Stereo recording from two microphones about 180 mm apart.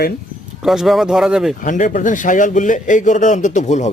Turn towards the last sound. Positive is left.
turn(degrees=40)  # may be behind; listen again after turning